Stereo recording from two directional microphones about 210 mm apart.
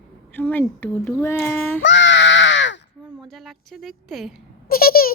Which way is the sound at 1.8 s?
60° left (ahead or behind).